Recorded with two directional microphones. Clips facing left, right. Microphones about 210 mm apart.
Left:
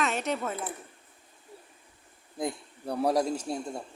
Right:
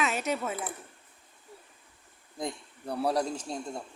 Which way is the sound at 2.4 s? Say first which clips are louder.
Left 3 dB; 10° left (ahead or behind).